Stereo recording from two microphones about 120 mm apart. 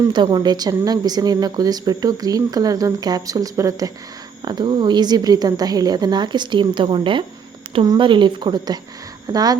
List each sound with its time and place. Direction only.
0.1 s speech: 35° right (ahead or behind)
4.4 s speech: 40° right (ahead or behind)